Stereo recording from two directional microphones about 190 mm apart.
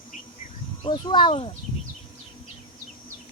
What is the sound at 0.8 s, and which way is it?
Speech, 25° left (ahead or behind).